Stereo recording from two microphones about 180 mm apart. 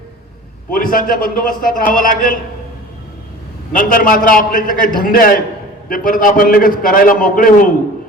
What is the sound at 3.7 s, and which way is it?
A man's voice, 50° left (ahead or behind).